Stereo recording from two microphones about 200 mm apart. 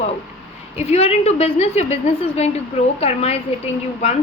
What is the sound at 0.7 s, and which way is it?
A woman's voice, 30° left (ahead or behind).